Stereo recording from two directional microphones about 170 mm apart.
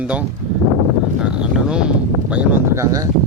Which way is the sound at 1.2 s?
5° right (ahead or behind).